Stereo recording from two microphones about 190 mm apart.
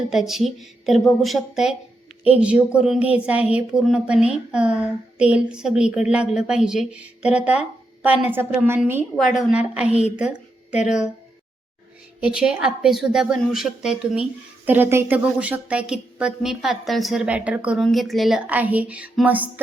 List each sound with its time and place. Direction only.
0.1 s a woman's voice: centre (ahead or behind)
9.8 s a woman's voice: 35° left (ahead or behind)
10.2 s a sound: 5° right (ahead or behind)
12.2 s a woman's voice: 5° right (ahead or behind)